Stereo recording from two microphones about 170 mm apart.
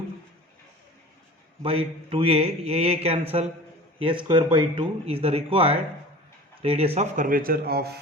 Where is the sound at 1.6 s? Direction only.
35° right (ahead or behind); by 7.9 s 65° right (ahead or behind).